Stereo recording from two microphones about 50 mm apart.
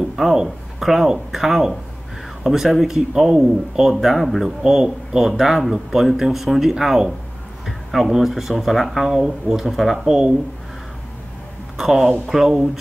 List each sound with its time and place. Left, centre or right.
0.1 s speech: centre
11.8 s speech: centre